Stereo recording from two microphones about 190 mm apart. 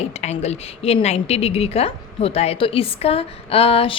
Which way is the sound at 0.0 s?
35° left (ahead or behind).